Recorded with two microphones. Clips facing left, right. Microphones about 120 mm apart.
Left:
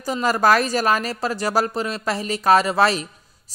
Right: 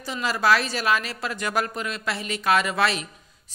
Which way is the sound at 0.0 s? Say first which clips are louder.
Left 5 dB; 45° left (ahead or behind).